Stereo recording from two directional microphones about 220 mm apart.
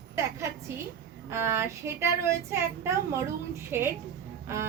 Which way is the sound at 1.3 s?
10° right (ahead or behind).